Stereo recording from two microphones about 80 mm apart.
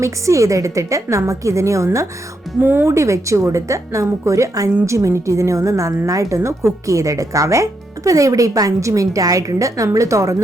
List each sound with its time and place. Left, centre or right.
0.0 s a woman's voice: right
2.6 s a woman's voice: right